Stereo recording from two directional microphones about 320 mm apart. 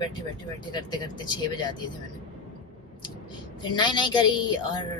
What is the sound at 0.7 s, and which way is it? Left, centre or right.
Speech, centre.